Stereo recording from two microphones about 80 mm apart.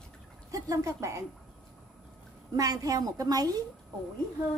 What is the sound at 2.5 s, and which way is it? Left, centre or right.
A woman's voice, right.